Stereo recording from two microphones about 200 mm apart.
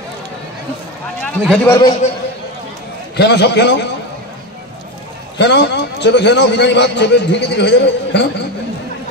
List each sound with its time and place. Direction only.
1.2 s a man's voice: centre (ahead or behind)
1.7 s a man's voice: 20° left (ahead or behind)
3.2 s a man's voice: 60° left (ahead or behind)
5.4 s a man's voice: 60° left (ahead or behind)